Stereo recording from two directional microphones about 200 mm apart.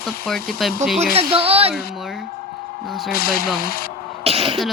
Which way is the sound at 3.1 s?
50° left (ahead or behind).